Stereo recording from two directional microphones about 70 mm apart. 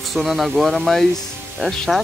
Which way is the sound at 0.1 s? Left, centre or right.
Centre.